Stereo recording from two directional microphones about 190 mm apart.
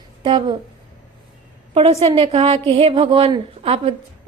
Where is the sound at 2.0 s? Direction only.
30° right (ahead or behind).